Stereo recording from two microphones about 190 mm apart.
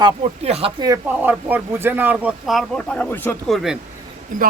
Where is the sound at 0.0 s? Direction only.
30° right (ahead or behind).